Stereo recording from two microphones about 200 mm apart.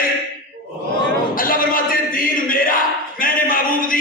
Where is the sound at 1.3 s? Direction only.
45° left (ahead or behind).